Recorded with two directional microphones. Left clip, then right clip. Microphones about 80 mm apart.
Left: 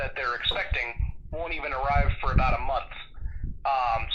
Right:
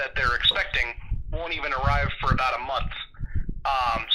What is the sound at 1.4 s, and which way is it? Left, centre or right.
Speech, right.